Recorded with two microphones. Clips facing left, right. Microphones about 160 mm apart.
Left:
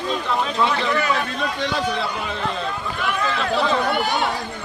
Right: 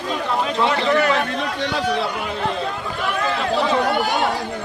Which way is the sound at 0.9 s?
60° right (ahead or behind).